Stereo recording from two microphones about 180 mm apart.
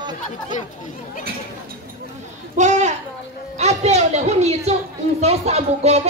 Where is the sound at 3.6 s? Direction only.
35° right (ahead or behind).